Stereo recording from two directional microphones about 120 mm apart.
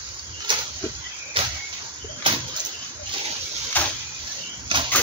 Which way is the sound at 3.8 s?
15° left (ahead or behind).